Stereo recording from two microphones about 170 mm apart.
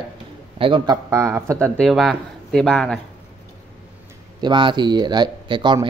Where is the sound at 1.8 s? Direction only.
Centre (ahead or behind).